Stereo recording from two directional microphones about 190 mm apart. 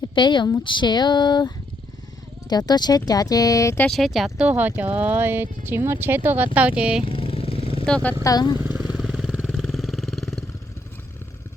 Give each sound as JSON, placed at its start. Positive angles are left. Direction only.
{"t": 0.1, "sound": "speech", "side_deg": 25}
{"t": 3.8, "sound": "speech", "side_deg": 0}
{"t": 7.0, "sound": "vehicle", "side_deg": 30}
{"t": 7.9, "sound": "speech", "side_deg": 5}
{"t": 8.2, "sound": "speech", "side_deg": 20}
{"t": 8.7, "sound": "vehicle", "side_deg": 0}